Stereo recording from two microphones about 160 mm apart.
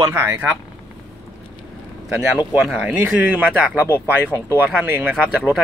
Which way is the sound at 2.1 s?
5° right (ahead or behind).